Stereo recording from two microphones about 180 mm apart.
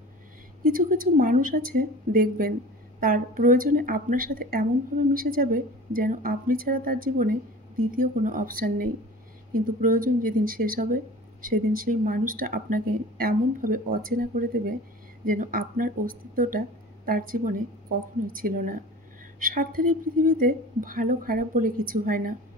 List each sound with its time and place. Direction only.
0.7 s speech: 50° right (ahead or behind)